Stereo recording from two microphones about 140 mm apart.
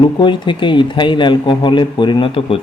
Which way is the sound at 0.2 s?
35° left (ahead or behind).